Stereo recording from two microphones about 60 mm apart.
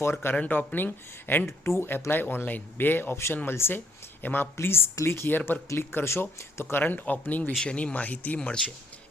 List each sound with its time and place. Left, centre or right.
0.0 s speech: left
0.3 s speech: left
1.5 s speech: left
7.6 s speech: centre
8.4 s speech: centre